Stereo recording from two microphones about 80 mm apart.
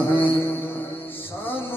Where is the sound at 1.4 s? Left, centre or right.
Left.